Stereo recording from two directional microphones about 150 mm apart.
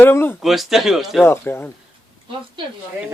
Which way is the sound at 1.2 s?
15° left (ahead or behind).